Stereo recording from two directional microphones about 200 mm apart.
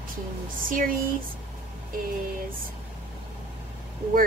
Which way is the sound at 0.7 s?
45° right (ahead or behind).